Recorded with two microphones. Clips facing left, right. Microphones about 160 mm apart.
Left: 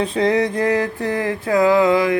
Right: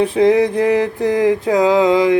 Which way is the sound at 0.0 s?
10° right (ahead or behind).